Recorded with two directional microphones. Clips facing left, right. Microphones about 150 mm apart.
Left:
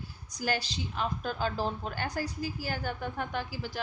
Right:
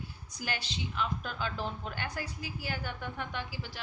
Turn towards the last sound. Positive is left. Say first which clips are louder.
# left 4 dB
turn(degrees=45)  # may be behind; listen again after turning